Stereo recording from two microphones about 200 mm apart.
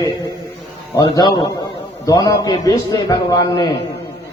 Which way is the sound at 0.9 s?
20° left (ahead or behind).